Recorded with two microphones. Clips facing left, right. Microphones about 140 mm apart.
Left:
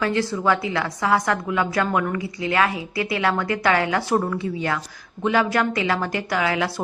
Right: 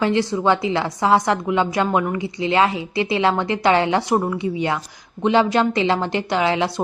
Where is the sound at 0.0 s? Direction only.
20° right (ahead or behind).